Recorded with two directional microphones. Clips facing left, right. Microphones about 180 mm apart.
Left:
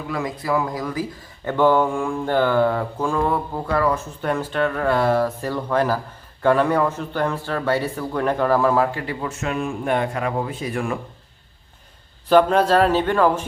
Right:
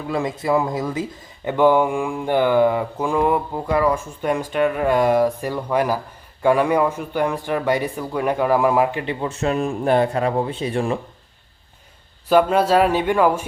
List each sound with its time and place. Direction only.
0.1 s speech: 25° right (ahead or behind)
1.5 s a man's voice: 15° right (ahead or behind)
12.3 s a man's voice: 10° right (ahead or behind)